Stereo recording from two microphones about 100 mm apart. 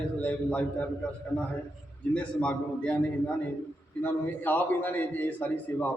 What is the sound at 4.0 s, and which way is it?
A man's voice, 20° left (ahead or behind).